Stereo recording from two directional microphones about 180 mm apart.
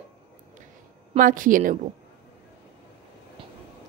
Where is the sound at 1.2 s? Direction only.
50° right (ahead or behind).